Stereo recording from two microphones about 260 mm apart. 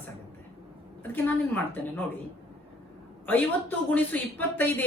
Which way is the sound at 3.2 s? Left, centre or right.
Centre.